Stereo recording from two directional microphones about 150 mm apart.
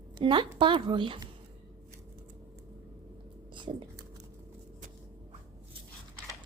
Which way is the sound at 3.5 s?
30° right (ahead or behind).